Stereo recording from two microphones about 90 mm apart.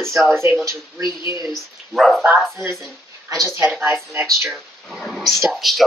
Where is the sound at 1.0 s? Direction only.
60° left (ahead or behind).